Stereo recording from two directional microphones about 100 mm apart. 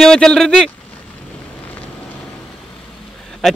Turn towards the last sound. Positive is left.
turn(degrees=5)  # may be behind; listen again after turning